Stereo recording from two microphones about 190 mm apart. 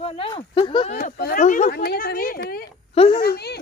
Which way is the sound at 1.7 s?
55° left (ahead or behind).